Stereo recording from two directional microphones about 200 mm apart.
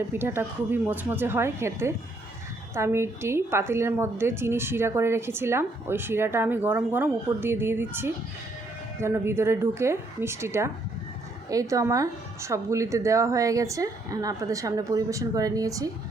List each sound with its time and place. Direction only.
0.1 s a woman's voice: 10° right (ahead or behind)